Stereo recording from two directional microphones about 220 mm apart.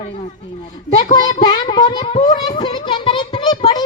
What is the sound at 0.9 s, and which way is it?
Speech, 30° left (ahead or behind).